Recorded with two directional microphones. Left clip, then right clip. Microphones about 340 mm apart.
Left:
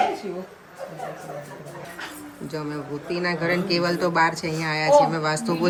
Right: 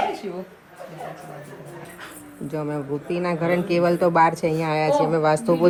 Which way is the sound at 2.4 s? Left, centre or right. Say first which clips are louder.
Right 4 dB; centre.